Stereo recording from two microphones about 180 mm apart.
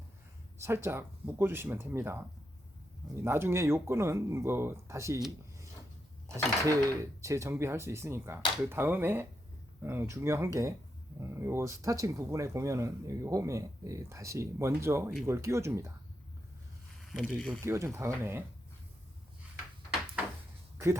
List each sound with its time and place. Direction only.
0.6 s speech: 15° right (ahead or behind)
6.2 s speech: 15° right (ahead or behind)
17.0 s speech: centre (ahead or behind)
17.6 s speech: 15° right (ahead or behind)